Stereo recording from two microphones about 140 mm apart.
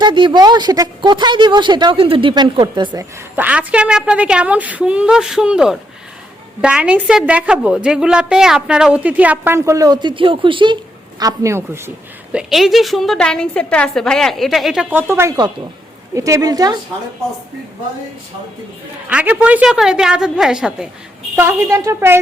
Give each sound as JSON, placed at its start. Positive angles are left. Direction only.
{"t": 0.0, "sound": "a woman's voice", "side_deg": -35}
{"t": 3.0, "sound": "a woman's voice", "side_deg": -10}
{"t": 11.2, "sound": "speech", "side_deg": -25}
{"t": 12.3, "sound": "a woman's voice", "side_deg": -5}
{"t": 19.0, "sound": "a woman's voice", "side_deg": -10}
{"t": 21.3, "sound": "a woman's voice", "side_deg": -15}